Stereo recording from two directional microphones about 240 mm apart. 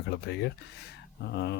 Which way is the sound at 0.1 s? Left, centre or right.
Left.